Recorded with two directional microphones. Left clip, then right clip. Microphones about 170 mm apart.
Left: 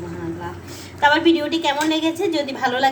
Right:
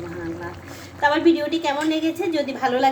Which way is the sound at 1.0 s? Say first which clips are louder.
Left 2 dB; 5° right (ahead or behind).